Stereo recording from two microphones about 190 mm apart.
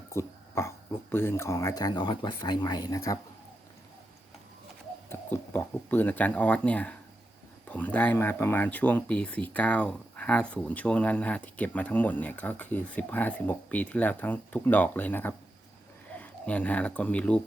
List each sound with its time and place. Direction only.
0.1 s dog: 15° left (ahead or behind)
1.1 s speech: 10° left (ahead or behind)
5.0 s speech: 10° left (ahead or behind)